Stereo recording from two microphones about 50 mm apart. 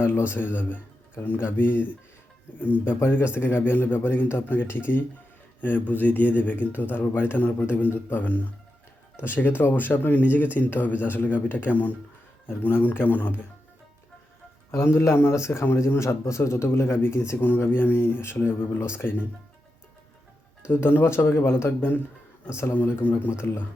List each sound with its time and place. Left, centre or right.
0.0 s a man's voice: left
12.5 s speech: left
14.7 s a man's voice: left
15.6 s speech: left
17.4 s speech: left
20.7 s speech: left
21.3 s speech: left
22.4 s speech: left
22.7 s speech: left
23.3 s speech: left